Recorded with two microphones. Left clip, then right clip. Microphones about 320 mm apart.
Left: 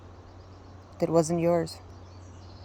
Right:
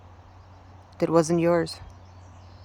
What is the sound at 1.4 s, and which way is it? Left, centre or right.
Speech, centre.